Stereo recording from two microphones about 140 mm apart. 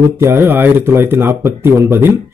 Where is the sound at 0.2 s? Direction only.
15° right (ahead or behind).